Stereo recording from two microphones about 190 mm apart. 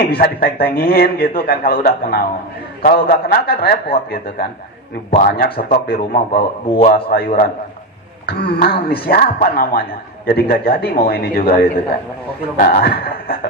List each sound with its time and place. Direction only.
0.1 s speech: 55° left (ahead or behind)
12.5 s speech: 50° left (ahead or behind)